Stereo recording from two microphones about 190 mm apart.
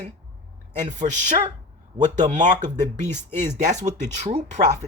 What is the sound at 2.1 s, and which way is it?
Speech, 40° right (ahead or behind).